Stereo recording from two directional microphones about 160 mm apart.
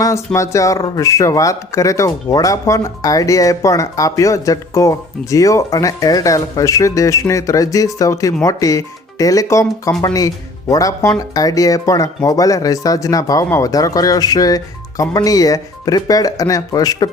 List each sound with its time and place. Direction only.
0.3 s speech: 20° left (ahead or behind)